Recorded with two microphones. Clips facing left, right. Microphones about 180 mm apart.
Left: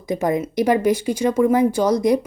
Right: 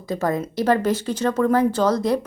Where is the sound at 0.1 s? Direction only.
15° left (ahead or behind).